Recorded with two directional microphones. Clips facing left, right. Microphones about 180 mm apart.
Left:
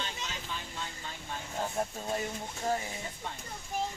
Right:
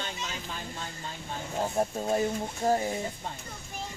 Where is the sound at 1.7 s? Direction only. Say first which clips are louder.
Right 8 dB; 35° right (ahead or behind).